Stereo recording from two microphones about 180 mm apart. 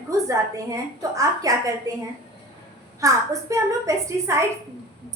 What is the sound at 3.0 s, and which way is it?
A woman's voice, 20° right (ahead or behind).